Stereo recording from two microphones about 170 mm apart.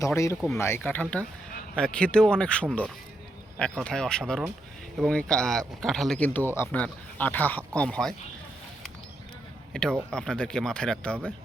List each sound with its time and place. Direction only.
0.0 s speech: 15° left (ahead or behind)
9.7 s speech: 5° left (ahead or behind)